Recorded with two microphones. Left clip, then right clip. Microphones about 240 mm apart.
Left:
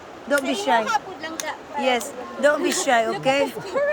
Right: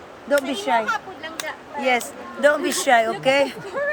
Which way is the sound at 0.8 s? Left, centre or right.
Left.